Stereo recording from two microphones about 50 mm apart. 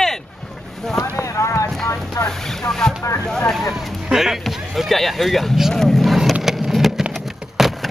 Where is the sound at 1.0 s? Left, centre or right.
Left.